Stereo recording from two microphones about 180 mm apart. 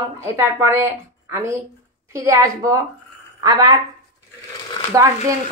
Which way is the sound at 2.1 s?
15° right (ahead or behind).